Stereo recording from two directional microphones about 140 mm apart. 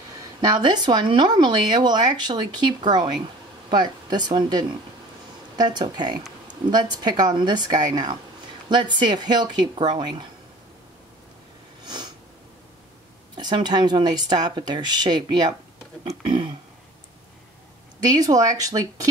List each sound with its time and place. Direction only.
0.4 s speech: 30° right (ahead or behind)
11.8 s sniff: 30° right (ahead or behind)
13.4 s speech: 30° right (ahead or behind)
18.0 s speech: 25° right (ahead or behind)